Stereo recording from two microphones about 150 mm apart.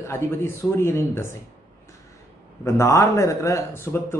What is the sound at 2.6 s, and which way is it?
Speech, 20° left (ahead or behind).